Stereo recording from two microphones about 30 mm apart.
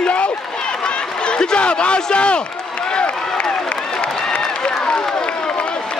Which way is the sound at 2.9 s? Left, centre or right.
Left.